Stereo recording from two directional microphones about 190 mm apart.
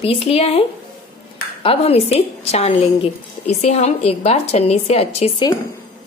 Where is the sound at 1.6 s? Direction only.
30° left (ahead or behind).